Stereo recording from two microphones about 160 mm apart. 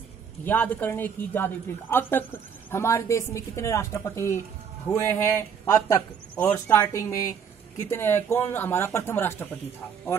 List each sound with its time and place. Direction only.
0.5 s a woman's voice: 10° left (ahead or behind)